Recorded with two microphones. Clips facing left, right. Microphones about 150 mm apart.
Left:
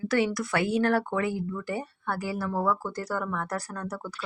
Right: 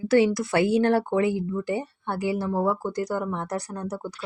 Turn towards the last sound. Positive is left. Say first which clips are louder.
# right 3 dB
turn(degrees=-20)  # may be behind; listen again after turning